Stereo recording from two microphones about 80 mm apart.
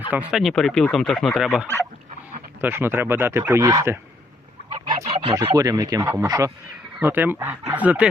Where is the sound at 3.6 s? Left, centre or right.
Right.